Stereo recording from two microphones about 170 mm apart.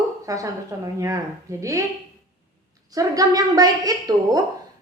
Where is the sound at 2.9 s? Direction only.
20° right (ahead or behind).